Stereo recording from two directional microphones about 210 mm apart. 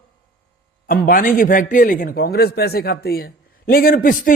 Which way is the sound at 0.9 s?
40° left (ahead or behind).